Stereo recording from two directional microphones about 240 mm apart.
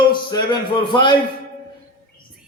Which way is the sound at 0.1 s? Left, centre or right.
Centre.